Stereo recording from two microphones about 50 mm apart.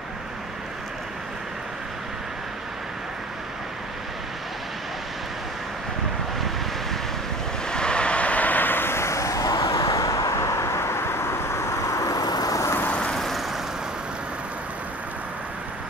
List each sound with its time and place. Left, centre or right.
7.6 s a sound: centre; by 12.0 s left
12.8 s vehicle: left
13.1 s vehicle: centre